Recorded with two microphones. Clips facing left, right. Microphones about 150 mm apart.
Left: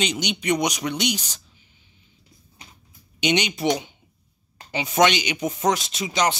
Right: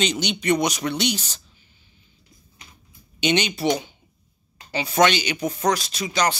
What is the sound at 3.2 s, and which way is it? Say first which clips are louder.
Speech: right 1 dB; 15° left (ahead or behind).